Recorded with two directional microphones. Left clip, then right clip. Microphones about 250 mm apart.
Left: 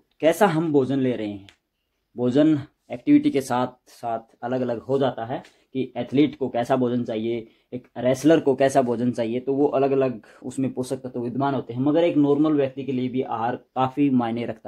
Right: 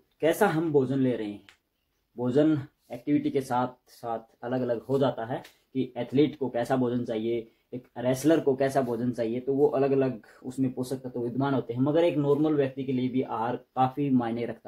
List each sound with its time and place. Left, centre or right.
0.2 s speech: left